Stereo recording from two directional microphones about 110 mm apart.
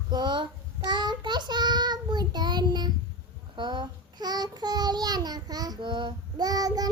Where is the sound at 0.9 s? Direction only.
40° right (ahead or behind).